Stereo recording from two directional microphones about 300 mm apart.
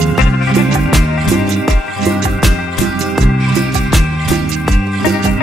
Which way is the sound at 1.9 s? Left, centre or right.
Centre.